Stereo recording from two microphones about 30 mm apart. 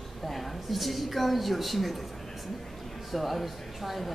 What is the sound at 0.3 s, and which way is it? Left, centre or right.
A woman's voice, centre.